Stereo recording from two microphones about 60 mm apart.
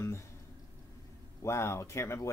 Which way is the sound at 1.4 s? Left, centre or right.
Left.